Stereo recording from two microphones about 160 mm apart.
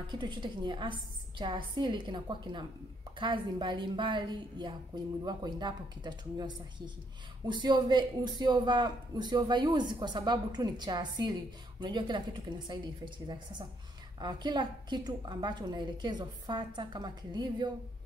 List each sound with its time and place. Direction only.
0.1 s a man's voice: 30° right (ahead or behind)